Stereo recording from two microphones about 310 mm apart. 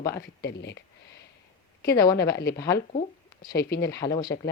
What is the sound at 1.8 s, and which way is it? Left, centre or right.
Speech, centre.